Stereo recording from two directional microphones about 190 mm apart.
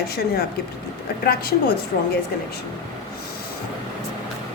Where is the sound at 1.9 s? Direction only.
50° left (ahead or behind).